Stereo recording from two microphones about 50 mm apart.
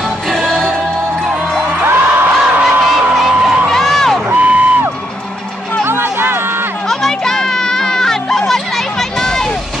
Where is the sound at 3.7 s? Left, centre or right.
Centre.